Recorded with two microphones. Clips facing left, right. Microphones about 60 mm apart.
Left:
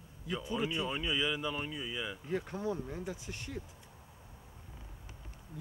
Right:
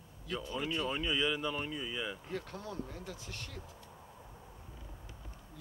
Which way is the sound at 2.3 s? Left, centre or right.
Centre.